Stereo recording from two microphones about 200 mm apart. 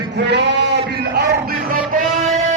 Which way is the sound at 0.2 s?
55° right (ahead or behind).